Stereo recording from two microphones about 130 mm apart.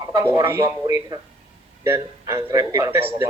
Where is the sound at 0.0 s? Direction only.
20° right (ahead or behind).